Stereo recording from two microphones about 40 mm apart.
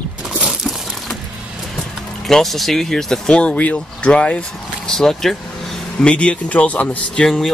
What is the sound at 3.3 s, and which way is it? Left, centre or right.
Speech, left.